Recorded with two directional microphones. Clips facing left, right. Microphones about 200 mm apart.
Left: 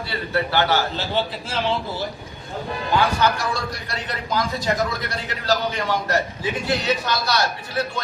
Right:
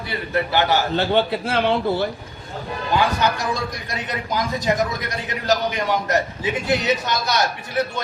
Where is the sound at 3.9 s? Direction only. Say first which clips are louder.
Even; 15° right (ahead or behind).